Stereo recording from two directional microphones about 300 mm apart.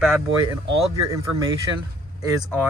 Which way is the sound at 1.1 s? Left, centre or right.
Centre.